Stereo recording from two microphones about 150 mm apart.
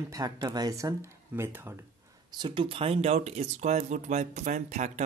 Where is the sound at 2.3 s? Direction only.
35° right (ahead or behind).